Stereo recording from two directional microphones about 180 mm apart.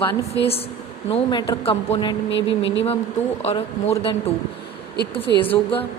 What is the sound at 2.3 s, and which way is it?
Speech, 90° left.